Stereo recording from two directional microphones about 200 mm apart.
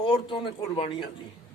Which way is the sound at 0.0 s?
25° left (ahead or behind).